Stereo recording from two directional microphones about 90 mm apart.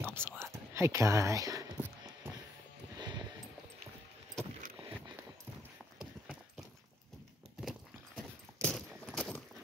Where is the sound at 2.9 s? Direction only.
50° right (ahead or behind).